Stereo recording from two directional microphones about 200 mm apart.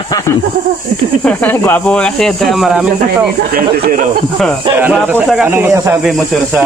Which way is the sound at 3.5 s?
45° right (ahead or behind).